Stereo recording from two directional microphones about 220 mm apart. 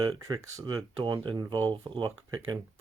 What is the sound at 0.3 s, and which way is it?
Speech, 15° right (ahead or behind).